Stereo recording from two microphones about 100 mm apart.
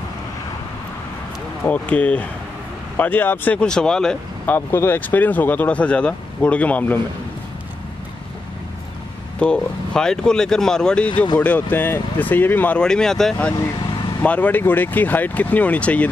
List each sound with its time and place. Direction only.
1.7 s speech: 15° left (ahead or behind)
4.5 s speech: 25° left (ahead or behind)
9.4 s speech: 10° left (ahead or behind)